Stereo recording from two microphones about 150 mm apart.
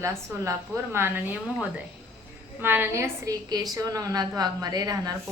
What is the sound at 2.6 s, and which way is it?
A woman's voice, 15° right (ahead or behind).